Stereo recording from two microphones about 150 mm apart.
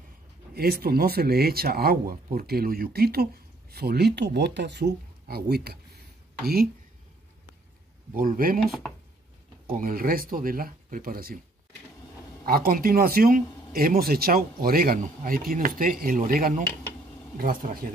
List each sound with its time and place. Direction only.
0.6 s speech: 90° right
8.1 s speech: 70° right (ahead or behind)
12.4 s speech: 80° right